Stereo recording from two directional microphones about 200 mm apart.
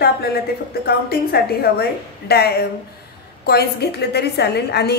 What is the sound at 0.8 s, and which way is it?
A woman's voice, 55° left (ahead or behind).